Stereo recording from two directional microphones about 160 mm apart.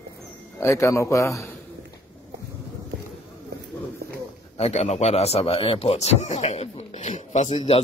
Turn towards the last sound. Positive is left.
turn(degrees=40)  # may be behind; listen again after turning